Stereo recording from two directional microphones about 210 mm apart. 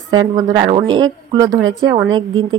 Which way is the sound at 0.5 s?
20° right (ahead or behind).